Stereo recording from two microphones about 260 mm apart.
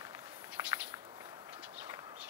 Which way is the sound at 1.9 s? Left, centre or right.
Centre.